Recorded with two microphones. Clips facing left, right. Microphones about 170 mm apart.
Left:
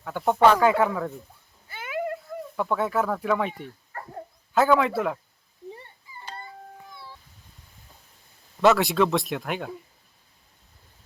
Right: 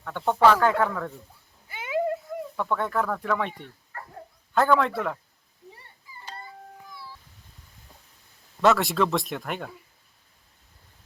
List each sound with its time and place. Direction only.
0.0 s speech: 10° left (ahead or behind)
1.6 s a sound: 15° right (ahead or behind)
2.6 s speech: 5° left (ahead or behind)
8.6 s speech: centre (ahead or behind)